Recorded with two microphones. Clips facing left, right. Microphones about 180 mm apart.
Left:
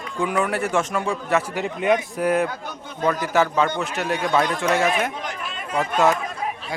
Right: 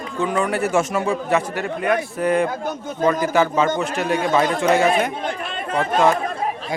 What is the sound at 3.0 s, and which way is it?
A man's voice, centre (ahead or behind).